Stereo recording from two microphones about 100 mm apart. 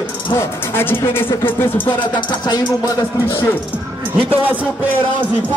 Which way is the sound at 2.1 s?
45° left (ahead or behind).